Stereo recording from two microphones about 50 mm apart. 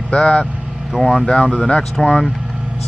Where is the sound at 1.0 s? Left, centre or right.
Centre.